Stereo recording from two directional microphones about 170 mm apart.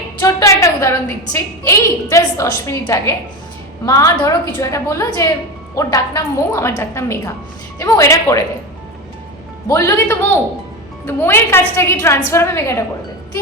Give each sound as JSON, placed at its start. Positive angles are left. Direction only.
{"t": 0.2, "sound": "a woman's voice", "side_deg": 20}
{"t": 9.6, "sound": "a woman's voice", "side_deg": 15}